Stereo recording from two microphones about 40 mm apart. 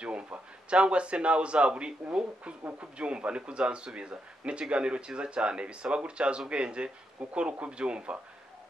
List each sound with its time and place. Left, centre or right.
0.0 s speech: right